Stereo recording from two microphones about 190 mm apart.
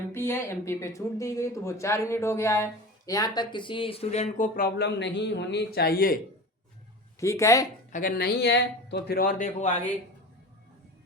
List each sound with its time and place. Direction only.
0.1 s speech: 15° left (ahead or behind); by 6.1 s 50° left (ahead or behind)
7.2 s speech: 15° left (ahead or behind)
7.9 s speech: 45° left (ahead or behind)